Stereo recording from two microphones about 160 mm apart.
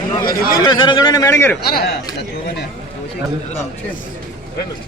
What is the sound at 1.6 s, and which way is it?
Speech, 75° left (ahead or behind).